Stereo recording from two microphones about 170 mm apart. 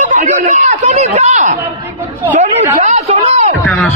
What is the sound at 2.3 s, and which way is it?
Speech, 45° right (ahead or behind).